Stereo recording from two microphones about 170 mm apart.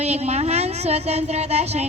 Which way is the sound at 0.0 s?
40° right (ahead or behind).